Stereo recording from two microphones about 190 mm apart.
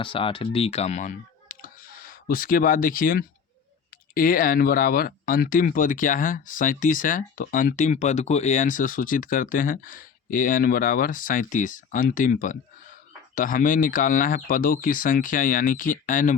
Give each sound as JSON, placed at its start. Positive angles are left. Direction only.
{"t": 0.0, "sound": "speech", "side_deg": 25}